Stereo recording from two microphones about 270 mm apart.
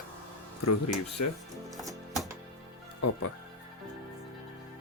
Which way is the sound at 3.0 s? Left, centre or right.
Left.